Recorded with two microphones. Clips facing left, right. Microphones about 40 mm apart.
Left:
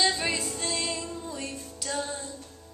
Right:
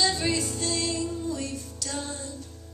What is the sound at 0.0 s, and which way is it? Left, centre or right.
Music, left.